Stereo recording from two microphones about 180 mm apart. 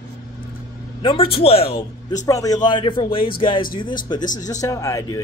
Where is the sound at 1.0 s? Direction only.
30° left (ahead or behind).